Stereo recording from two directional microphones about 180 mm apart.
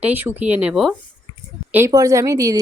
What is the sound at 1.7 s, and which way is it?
Speech, 15° right (ahead or behind).